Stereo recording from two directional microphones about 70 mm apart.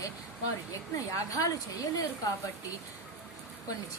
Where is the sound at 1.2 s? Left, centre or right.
Left.